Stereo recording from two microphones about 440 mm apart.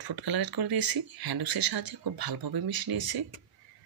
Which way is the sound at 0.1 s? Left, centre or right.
Right.